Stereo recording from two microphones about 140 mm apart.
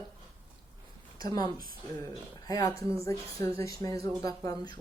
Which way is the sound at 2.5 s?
25° left (ahead or behind).